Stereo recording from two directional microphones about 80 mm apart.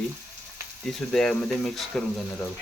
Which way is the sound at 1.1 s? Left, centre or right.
Centre.